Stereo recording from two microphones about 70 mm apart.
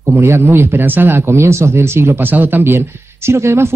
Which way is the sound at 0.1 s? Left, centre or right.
Right.